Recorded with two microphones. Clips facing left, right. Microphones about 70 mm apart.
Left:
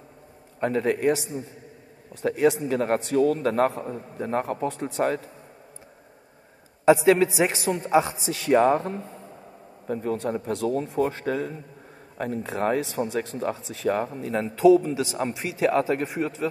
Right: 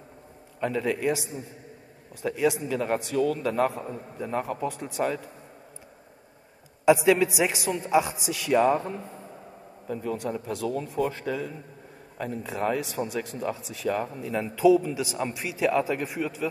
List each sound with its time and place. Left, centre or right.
0.6 s a man's voice: left
6.9 s a man's voice: left